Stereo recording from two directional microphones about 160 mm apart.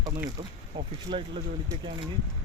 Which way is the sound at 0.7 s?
35° right (ahead or behind).